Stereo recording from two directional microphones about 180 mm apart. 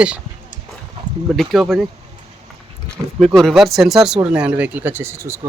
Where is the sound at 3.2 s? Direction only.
Centre (ahead or behind).